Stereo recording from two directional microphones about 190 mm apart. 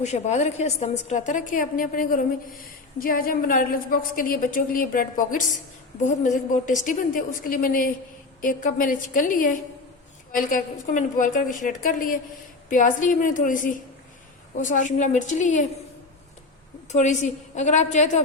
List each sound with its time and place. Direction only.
0.0 s a woman's voice: 35° left (ahead or behind)
16.9 s a woman's voice: 40° left (ahead or behind)